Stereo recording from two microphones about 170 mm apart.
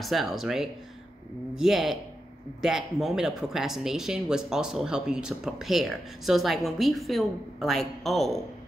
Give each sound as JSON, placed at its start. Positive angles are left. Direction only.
{"t": 0.0, "sound": "speech", "side_deg": 0}